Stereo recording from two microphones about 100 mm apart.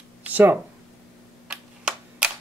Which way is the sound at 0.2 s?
20° right (ahead or behind).